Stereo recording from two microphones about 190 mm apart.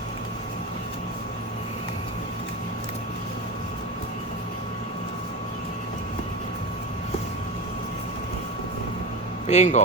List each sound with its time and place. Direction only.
9.5 s speech: 40° left (ahead or behind)